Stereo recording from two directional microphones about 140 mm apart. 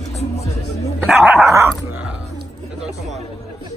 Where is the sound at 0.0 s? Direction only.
55° left (ahead or behind).